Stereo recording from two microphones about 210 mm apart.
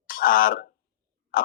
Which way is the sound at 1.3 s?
45° left (ahead or behind).